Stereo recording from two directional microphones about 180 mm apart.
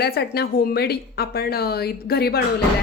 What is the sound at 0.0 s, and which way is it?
A woman's voice, 60° left (ahead or behind).